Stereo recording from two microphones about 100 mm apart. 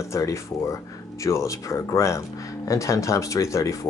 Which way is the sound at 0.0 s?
30° left (ahead or behind).